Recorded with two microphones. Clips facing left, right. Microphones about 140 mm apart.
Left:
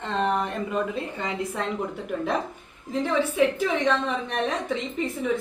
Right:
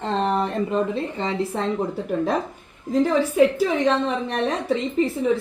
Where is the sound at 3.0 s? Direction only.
40° right (ahead or behind).